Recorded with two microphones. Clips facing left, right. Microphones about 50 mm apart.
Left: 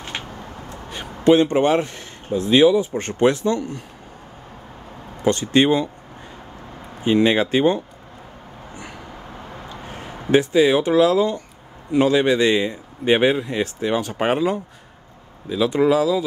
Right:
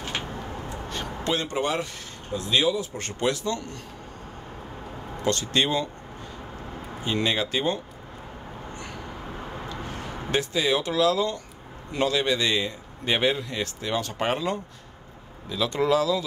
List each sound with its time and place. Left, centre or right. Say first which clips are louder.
0.8 s speech: left 13 dB; centre
3.5 s speech: left 8 dB; centre
5.2 s a man's voice: left 7 dB; left
7.1 s a man's voice: left 9 dB; left
9.9 s a man's voice: left 10 dB; centre